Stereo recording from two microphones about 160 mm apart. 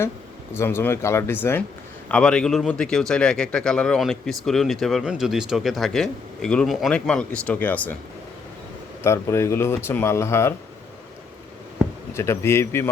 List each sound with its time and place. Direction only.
0.5 s a man's voice: 15° left (ahead or behind)
9.0 s speech: 15° left (ahead or behind)
12.1 s speech: 15° left (ahead or behind)